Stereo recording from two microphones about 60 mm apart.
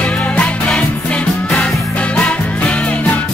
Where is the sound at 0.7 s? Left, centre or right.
Centre.